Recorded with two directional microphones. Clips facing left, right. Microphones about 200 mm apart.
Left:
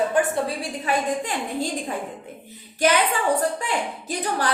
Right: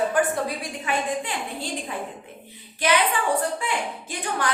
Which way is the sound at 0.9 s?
35° left (ahead or behind).